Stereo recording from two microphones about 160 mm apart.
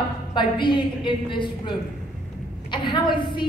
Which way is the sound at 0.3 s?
30° left (ahead or behind).